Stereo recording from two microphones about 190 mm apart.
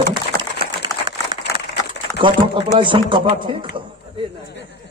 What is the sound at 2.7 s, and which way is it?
Speech, 25° right (ahead or behind).